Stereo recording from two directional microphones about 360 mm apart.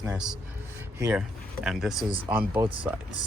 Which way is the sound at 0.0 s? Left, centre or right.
Centre.